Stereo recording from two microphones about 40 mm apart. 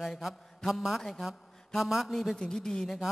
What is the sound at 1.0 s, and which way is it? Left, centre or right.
Speech, centre.